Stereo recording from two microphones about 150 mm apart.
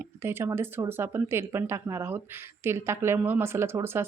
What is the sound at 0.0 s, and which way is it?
Speech, 15° right (ahead or behind).